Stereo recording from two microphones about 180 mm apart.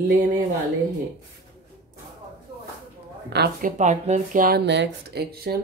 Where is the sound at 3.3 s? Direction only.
55° right (ahead or behind).